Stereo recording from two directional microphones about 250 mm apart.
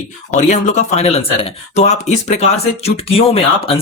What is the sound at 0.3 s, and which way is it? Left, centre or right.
Speech, left.